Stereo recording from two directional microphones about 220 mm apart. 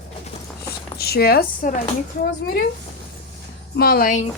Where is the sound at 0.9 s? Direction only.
45° left (ahead or behind).